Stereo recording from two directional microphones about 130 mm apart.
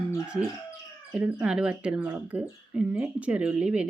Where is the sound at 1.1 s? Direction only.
5° right (ahead or behind).